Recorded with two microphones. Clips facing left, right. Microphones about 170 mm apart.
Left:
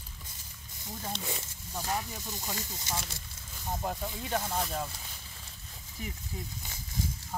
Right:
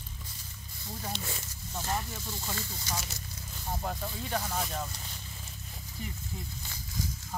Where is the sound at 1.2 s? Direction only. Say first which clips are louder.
Left 1 dB; 15° left (ahead or behind).